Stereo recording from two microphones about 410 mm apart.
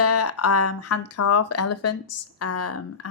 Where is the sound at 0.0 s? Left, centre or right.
Left.